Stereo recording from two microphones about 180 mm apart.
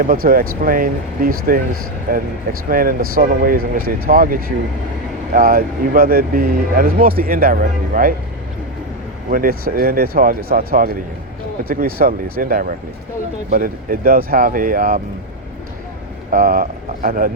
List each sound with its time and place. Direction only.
0.0 s speech: 50° right (ahead or behind)
9.3 s speech: 55° right (ahead or behind)
16.3 s speech: 50° right (ahead or behind)